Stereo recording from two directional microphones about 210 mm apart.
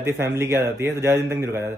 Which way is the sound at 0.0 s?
10° right (ahead or behind).